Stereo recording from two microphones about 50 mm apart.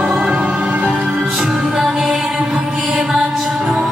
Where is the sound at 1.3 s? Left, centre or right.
Centre.